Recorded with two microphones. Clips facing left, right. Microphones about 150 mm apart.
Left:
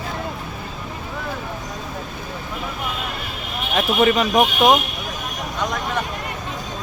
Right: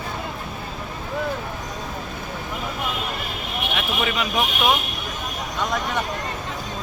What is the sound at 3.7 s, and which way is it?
Speech, 40° left (ahead or behind).